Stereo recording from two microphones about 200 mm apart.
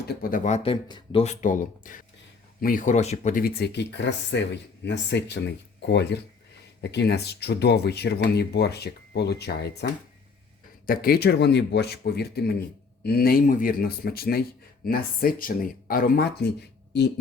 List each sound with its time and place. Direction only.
0.2 s speech: 45° left (ahead or behind)